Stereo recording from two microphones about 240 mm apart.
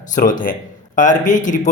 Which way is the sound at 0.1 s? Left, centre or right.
Left.